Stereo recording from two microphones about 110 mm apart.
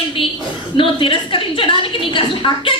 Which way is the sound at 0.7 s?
50° left (ahead or behind).